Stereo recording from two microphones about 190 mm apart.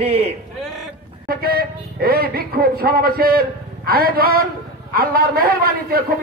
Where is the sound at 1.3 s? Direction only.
55° right (ahead or behind).